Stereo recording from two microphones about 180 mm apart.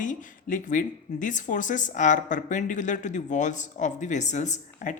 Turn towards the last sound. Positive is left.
turn(degrees=45)  # may be behind; listen again after turning